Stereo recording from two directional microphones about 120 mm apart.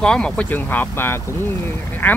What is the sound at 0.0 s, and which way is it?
Speech, 5° left (ahead or behind).